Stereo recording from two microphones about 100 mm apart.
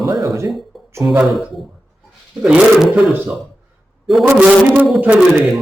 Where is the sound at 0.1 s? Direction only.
40° right (ahead or behind).